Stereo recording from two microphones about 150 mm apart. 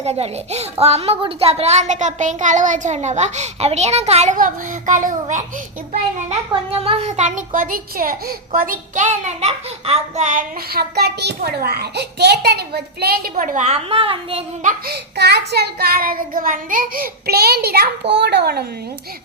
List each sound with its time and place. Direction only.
0.0 s a child's voice: 45° right (ahead or behind)
6.2 s a child's voice: 40° right (ahead or behind)
10.7 s child singing: 90° right
13.3 s a child's voice: 55° right (ahead or behind); by 14.4 s 40° right (ahead or behind)
14.6 s child singing: 75° right (ahead or behind)